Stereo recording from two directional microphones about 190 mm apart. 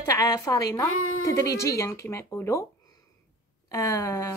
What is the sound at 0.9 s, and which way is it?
Speech, 90° left.